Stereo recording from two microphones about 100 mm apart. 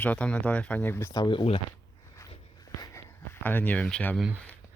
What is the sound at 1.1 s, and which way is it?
Speech, 45° left (ahead or behind).